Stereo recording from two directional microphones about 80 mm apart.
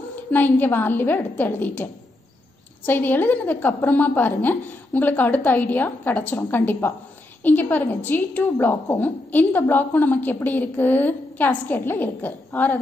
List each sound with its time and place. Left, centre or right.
0.1 s a woman's voice: left